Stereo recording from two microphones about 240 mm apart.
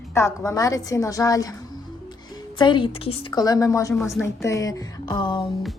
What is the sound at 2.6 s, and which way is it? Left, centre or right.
A woman's voice, centre.